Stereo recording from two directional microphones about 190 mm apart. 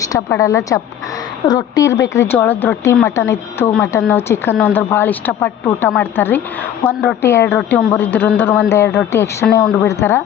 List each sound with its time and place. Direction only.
0.1 s a woman's voice: 15° left (ahead or behind)